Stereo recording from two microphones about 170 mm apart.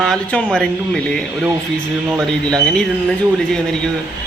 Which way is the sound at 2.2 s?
5° left (ahead or behind).